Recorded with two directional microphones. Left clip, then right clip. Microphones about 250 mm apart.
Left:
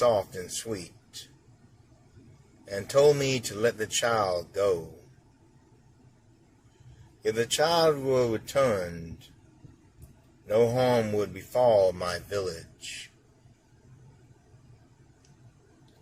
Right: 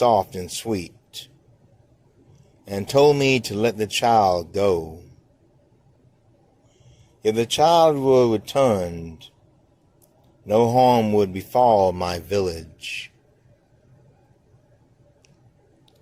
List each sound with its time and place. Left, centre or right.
0.0 s speech: right
2.6 s speech: right
7.2 s speech: right
10.4 s speech: right